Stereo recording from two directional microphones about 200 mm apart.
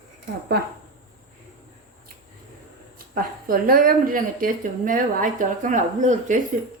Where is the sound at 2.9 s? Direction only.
45° right (ahead or behind).